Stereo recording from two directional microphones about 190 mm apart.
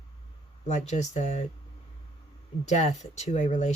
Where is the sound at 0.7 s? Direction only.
40° left (ahead or behind).